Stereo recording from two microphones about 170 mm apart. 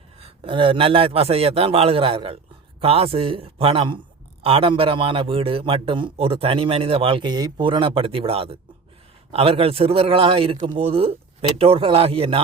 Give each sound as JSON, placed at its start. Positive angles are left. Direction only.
{"t": 0.2, "sound": "a man's voice", "side_deg": -35}